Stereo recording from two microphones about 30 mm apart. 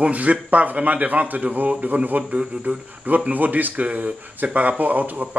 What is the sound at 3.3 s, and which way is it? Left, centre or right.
A man's voice, right.